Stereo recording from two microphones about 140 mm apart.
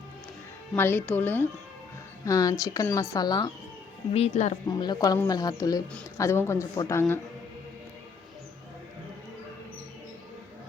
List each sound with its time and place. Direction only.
0.8 s speech: 15° left (ahead or behind)
2.2 s speech: 25° left (ahead or behind)
4.1 s speech: 50° left (ahead or behind)
4.7 s speech: 30° left (ahead or behind)